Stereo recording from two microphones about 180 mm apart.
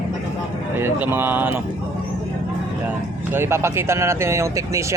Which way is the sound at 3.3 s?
15° right (ahead or behind).